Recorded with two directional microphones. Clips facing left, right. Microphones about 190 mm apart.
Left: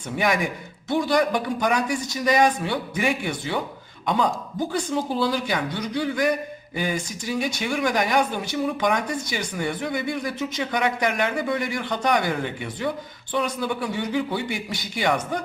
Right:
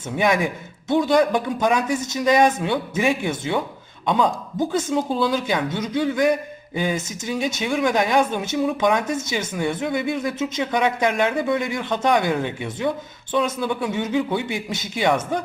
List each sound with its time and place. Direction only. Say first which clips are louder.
0.9 s speech: right 4 dB; 20° right (ahead or behind)